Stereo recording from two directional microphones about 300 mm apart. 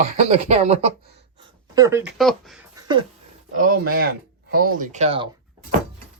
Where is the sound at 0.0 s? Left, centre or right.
Right; by 2.6 s centre.